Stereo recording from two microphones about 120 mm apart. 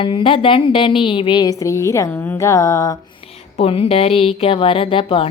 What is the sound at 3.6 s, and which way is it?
Speech, 55° left (ahead or behind).